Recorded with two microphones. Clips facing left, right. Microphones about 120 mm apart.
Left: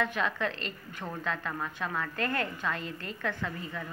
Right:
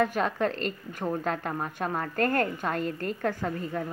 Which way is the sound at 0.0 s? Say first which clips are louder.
Right 5 dB; 45° right (ahead or behind).